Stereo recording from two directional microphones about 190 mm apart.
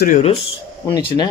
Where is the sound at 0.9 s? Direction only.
25° left (ahead or behind).